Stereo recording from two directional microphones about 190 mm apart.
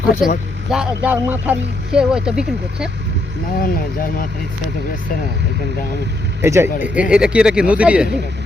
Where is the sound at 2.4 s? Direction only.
60° right (ahead or behind).